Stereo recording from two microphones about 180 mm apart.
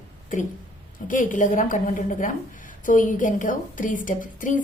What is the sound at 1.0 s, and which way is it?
A woman's voice, 45° left (ahead or behind).